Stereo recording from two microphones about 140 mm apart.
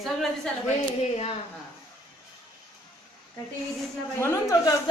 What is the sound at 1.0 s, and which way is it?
Speech, 50° left (ahead or behind).